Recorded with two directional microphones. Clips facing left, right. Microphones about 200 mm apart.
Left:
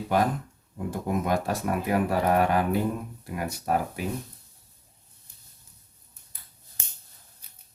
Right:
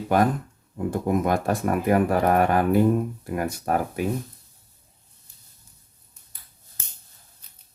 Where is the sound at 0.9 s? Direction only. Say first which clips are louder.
Right 4 dB; 50° right (ahead or behind).